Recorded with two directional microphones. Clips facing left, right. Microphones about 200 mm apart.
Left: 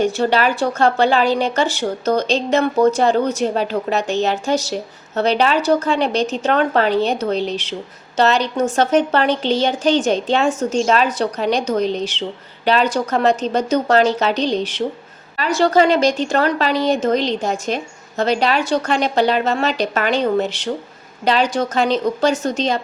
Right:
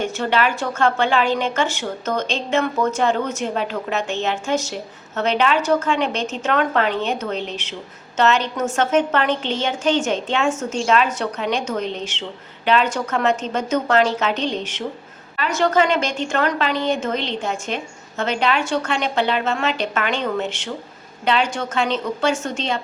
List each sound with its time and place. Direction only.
0.0 s a woman's voice: 35° left (ahead or behind)